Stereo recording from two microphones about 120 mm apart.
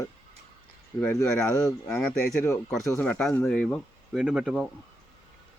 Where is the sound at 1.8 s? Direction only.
5° left (ahead or behind).